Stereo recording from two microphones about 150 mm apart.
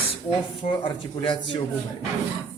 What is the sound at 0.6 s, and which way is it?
Speech, 35° left (ahead or behind).